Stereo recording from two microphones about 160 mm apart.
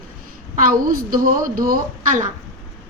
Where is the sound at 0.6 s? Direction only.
65° right (ahead or behind).